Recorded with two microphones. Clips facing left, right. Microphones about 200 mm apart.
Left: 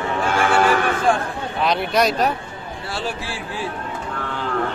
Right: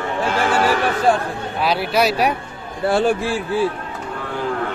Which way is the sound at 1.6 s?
5° right (ahead or behind).